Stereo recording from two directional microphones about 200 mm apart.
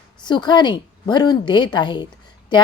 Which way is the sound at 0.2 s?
20° left (ahead or behind).